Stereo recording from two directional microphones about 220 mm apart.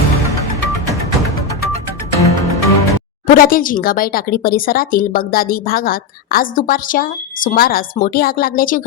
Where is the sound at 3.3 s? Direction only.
40° left (ahead or behind).